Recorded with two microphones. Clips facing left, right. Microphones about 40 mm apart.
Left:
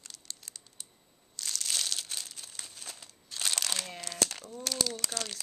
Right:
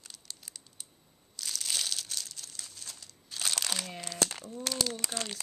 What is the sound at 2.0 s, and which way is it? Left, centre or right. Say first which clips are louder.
Crumpling: even; centre.